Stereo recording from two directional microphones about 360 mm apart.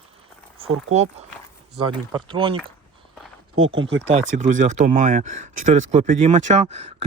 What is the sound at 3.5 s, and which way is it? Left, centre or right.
Speech, right.